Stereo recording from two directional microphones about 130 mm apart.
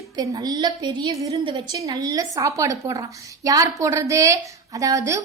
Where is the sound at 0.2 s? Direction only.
30° right (ahead or behind).